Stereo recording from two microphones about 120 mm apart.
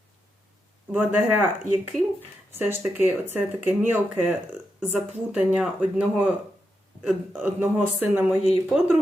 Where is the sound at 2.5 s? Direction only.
15° right (ahead or behind).